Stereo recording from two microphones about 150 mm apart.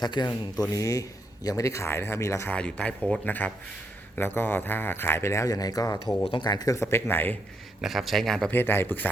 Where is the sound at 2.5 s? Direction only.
10° left (ahead or behind).